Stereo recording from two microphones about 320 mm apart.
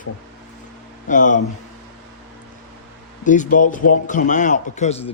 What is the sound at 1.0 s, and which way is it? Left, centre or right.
Speech, left.